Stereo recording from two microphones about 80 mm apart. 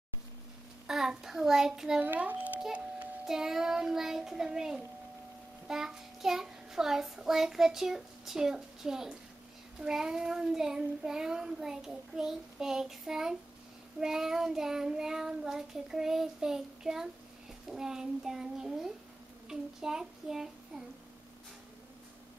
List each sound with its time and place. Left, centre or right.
0.8 s child singing: centre
2.0 s a child's voice: centre
3.3 s child singing: centre